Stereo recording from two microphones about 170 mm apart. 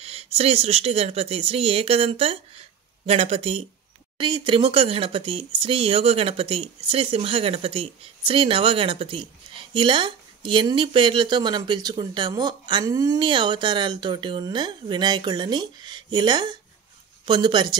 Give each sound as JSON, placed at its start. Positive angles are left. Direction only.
{"t": 0.0, "sound": "speech", "side_deg": -35}